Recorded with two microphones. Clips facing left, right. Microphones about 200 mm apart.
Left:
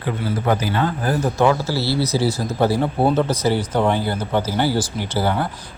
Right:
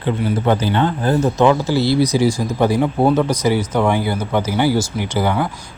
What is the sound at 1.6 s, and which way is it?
Speech, 15° right (ahead or behind).